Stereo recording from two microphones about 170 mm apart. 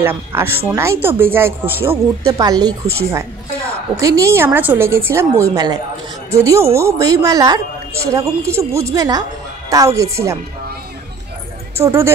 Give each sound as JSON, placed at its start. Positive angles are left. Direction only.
{"t": 0.0, "sound": "a woman's voice", "side_deg": -15}
{"t": 11.7, "sound": "speech", "side_deg": -15}